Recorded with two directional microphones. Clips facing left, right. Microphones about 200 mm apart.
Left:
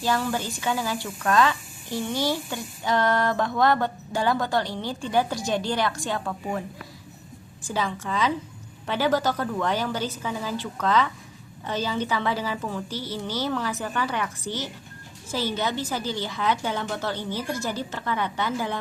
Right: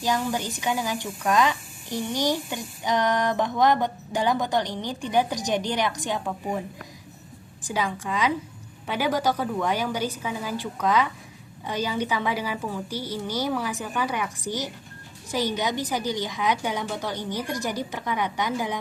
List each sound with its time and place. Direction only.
0.0 s speech: 15° right (ahead or behind)
7.7 s speech: 10° right (ahead or behind)